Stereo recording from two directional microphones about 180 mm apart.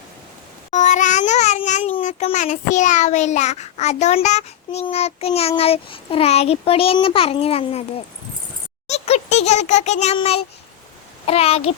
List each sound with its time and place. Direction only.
0.7 s a child's voice: 45° left (ahead or behind)
8.9 s a child's voice: 35° left (ahead or behind)